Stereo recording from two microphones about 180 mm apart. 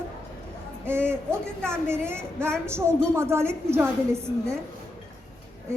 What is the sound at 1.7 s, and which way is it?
Speech, 15° right (ahead or behind).